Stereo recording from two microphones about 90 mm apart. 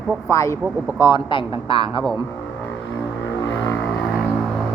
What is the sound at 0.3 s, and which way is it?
Speech, 35° left (ahead or behind).